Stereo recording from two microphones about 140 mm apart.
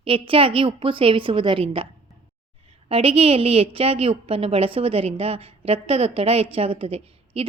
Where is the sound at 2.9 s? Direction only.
40° right (ahead or behind).